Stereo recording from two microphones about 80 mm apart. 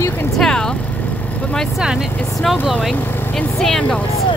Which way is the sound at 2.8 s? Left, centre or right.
Centre.